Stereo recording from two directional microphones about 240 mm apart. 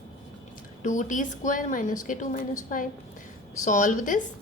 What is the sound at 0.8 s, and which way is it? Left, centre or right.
A woman's voice, left.